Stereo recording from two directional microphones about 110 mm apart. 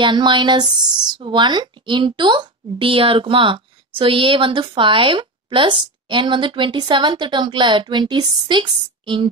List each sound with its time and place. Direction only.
0.0 s speech: 45° right (ahead or behind)